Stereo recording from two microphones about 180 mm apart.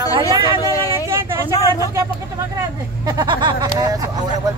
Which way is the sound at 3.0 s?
25° right (ahead or behind).